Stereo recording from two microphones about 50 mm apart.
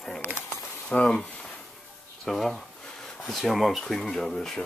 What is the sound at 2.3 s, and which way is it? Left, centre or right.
Speech, centre.